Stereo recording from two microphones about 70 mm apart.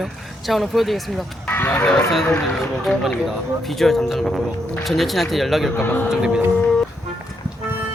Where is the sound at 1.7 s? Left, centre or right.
Centre.